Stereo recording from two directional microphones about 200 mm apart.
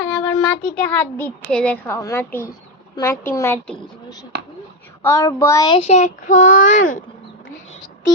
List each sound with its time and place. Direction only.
0.0 s a child's voice: 10° left (ahead or behind); by 7.0 s 40° left (ahead or behind)